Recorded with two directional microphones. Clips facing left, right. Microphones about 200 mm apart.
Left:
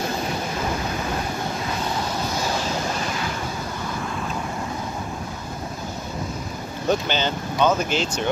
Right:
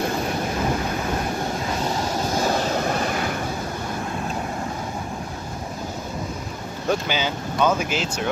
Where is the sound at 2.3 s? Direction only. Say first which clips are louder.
Right 6 dB; 55° right (ahead or behind).